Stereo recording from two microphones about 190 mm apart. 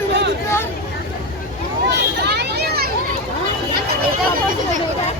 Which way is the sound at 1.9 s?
60° right (ahead or behind).